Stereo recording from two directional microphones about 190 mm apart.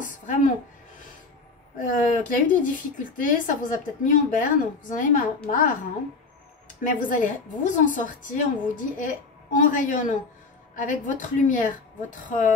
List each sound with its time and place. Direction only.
0.0 s music: 45° left (ahead or behind)
2.0 s a woman's voice: 45° left (ahead or behind)
6.8 s a woman's voice: 45° left (ahead or behind)